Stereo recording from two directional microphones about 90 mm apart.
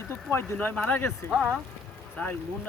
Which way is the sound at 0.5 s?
15° left (ahead or behind).